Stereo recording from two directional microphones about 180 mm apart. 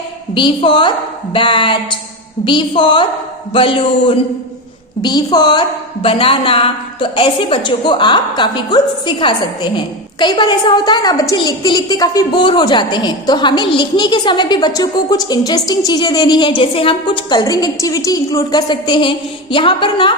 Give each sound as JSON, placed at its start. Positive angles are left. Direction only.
{"t": 0.3, "sound": "a woman's voice", "side_deg": 25}